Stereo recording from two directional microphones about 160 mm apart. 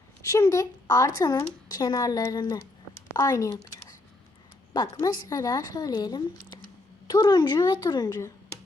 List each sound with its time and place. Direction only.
0.2 s speech: 20° left (ahead or behind)